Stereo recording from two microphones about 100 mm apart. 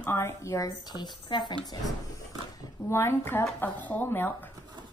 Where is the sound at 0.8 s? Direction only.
45° left (ahead or behind).